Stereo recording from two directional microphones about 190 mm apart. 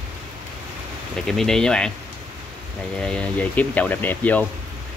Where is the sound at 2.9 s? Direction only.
5° left (ahead or behind).